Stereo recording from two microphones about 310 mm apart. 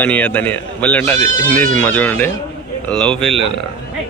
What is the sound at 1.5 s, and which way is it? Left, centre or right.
Speech, right.